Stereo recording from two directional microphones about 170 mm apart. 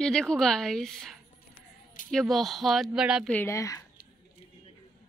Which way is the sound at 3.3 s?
15° left (ahead or behind).